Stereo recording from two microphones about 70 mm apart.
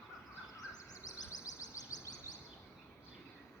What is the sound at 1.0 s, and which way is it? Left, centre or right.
Bird, left.